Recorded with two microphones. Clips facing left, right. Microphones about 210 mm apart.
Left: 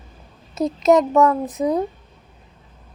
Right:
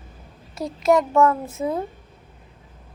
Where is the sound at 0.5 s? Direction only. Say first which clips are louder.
Left 4 dB; 20° left (ahead or behind).